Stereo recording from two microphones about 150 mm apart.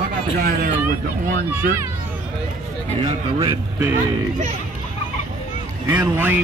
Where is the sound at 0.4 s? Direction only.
80° right.